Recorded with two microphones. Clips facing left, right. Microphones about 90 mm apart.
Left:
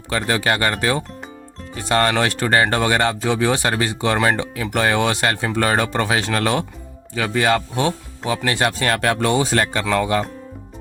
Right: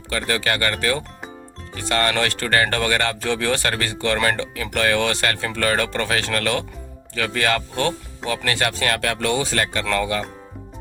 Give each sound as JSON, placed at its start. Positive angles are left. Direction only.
{"t": 0.1, "sound": "speech", "side_deg": 30}
{"t": 9.8, "sound": "speech", "side_deg": 15}